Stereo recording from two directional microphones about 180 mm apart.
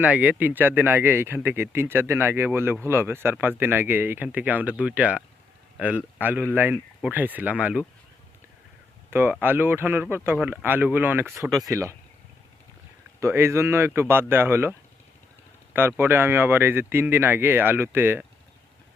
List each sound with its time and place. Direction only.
0.0 s speech: 10° right (ahead or behind)
9.0 s speech: 10° right (ahead or behind)
13.1 s speech: 15° right (ahead or behind)